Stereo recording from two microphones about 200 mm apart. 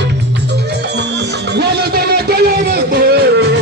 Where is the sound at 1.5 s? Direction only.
55° right (ahead or behind).